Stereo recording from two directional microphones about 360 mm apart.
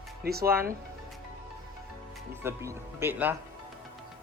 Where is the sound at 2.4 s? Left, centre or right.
Centre.